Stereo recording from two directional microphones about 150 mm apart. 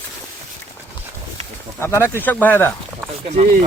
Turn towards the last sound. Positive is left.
turn(degrees=-50)  # may be behind; listen again after turning